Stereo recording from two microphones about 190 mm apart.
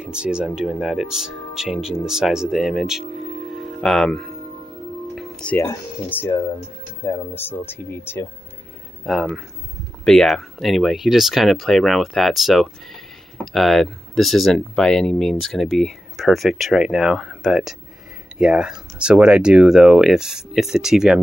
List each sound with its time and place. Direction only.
0.0 s speech: 5° right (ahead or behind); by 8.3 s 10° left (ahead or behind)
9.0 s speech: centre (ahead or behind)